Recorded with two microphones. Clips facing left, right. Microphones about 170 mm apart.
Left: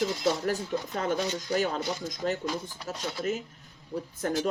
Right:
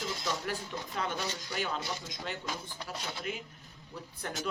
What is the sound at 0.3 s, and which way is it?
Speech, 40° left (ahead or behind).